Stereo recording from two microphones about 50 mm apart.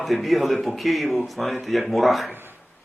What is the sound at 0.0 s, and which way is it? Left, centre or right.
Speech, centre.